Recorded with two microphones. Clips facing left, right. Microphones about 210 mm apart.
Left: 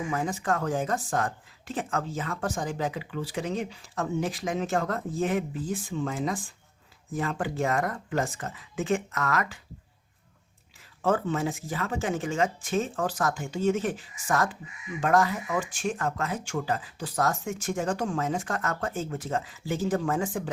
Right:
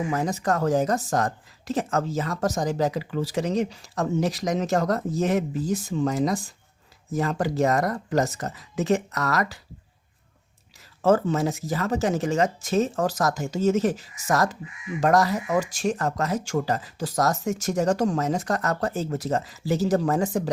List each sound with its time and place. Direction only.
0.1 s speech: 40° right (ahead or behind)
11.0 s speech: 40° right (ahead or behind)